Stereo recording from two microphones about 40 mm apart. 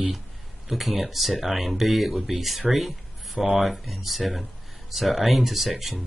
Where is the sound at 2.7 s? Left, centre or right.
Centre.